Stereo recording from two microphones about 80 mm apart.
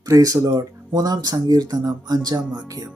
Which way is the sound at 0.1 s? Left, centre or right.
Right.